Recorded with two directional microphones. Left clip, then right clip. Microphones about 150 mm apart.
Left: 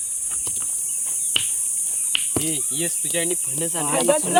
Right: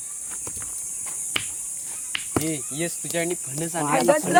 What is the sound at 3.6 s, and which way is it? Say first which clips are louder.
Speech: right 2 dB; 65° right (ahead or behind).